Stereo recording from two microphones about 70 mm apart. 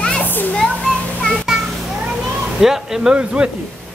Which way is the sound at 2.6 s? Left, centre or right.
Centre.